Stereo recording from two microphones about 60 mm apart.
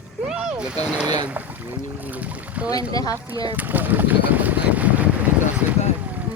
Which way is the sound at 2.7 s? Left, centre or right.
Left.